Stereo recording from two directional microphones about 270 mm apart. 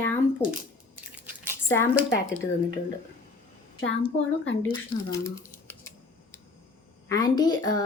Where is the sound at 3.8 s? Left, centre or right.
Left.